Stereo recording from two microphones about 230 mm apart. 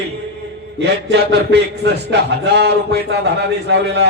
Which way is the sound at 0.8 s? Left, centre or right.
Right.